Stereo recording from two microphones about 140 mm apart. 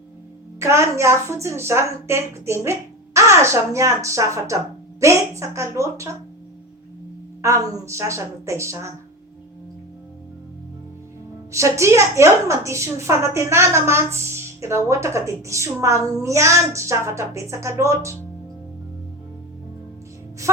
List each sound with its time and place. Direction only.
0.6 s a woman's voice: 20° right (ahead or behind)
7.4 s a woman's voice: 20° right (ahead or behind)
11.5 s a woman's voice: 20° right (ahead or behind)